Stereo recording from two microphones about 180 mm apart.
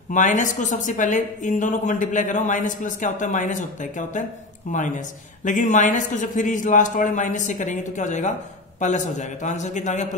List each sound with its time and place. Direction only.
0.1 s a woman's voice: 45° left (ahead or behind)